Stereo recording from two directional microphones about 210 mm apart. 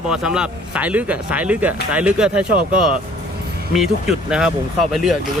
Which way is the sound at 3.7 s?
Centre (ahead or behind).